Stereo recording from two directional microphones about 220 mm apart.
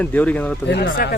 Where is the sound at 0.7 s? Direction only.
50° left (ahead or behind).